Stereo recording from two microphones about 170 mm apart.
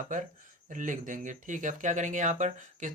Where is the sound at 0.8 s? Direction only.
50° right (ahead or behind).